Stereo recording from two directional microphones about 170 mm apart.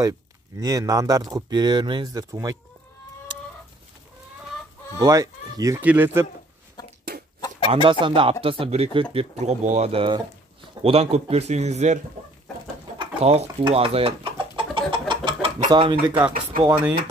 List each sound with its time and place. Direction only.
0.6 s speech: 20° right (ahead or behind)
4.9 s speech: 20° right (ahead or behind)
6.8 s chicken: 25° left (ahead or behind)
7.7 s speech: 30° right (ahead or behind)
13.0 s bird: 35° right (ahead or behind)
16.6 s speech: 20° right (ahead or behind)